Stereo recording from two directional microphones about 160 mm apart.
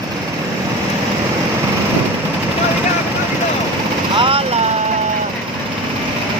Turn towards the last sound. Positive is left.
turn(degrees=-35)  # may be behind; listen again after turning